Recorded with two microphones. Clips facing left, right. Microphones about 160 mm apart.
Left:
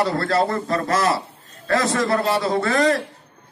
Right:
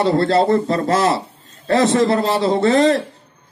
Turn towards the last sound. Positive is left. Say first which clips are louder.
# right 5 dB
turn(degrees=-25)  # may be behind; listen again after turning